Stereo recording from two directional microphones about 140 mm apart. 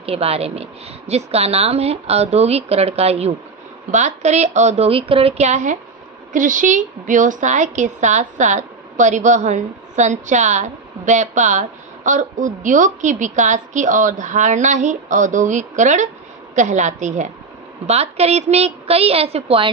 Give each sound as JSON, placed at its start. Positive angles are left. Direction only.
{"t": 0.0, "sound": "a woman's voice", "side_deg": -45}
{"t": 6.3, "sound": "a woman's voice", "side_deg": -70}
{"t": 17.8, "sound": "a woman's voice", "side_deg": -50}